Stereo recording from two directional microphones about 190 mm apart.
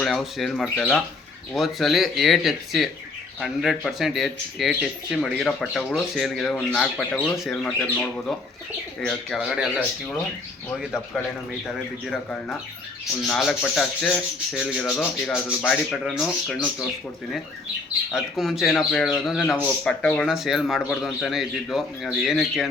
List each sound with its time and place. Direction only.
0.0 s speech: centre (ahead or behind)
18.1 s speech: centre (ahead or behind)